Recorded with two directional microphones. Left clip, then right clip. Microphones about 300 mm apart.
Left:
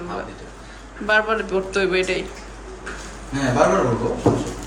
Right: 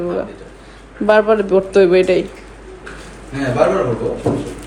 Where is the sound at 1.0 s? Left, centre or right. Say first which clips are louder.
Right 7 dB; centre.